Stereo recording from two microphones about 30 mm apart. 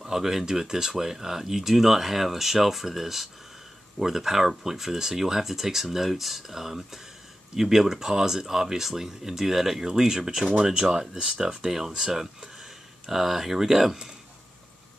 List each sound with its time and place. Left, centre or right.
0.0 s speech: centre